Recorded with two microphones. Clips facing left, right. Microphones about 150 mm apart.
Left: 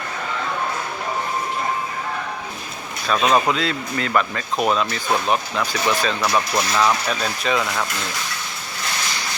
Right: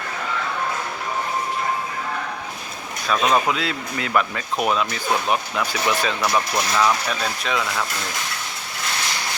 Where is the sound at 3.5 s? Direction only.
5° right (ahead or behind).